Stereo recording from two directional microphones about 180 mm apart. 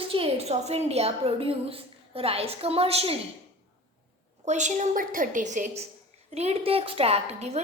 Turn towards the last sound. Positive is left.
turn(degrees=-35)  # may be behind; listen again after turning